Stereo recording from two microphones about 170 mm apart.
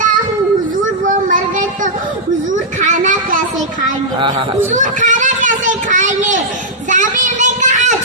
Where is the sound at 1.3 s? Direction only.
50° right (ahead or behind).